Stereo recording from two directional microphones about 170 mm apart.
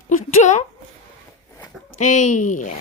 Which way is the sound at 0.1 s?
45° left (ahead or behind).